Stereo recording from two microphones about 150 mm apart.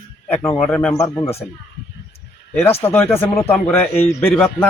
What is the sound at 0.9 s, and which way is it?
Speech, 20° left (ahead or behind).